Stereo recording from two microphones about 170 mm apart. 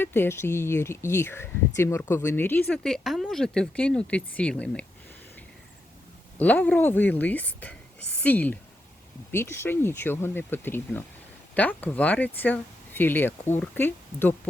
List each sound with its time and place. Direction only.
0.0 s speech: 15° left (ahead or behind)
6.3 s speech: 10° left (ahead or behind)